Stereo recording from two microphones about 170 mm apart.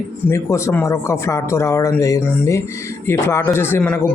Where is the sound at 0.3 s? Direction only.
15° left (ahead or behind).